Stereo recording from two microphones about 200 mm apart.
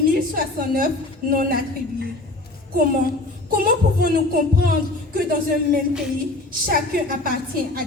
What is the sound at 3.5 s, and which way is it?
Speech, 50° right (ahead or behind).